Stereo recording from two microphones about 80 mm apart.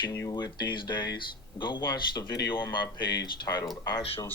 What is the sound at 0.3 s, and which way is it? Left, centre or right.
Speech, left.